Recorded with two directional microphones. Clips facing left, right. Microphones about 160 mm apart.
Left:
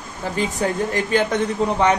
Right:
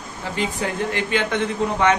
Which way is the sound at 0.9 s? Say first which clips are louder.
Left 3 dB; 40° left (ahead or behind).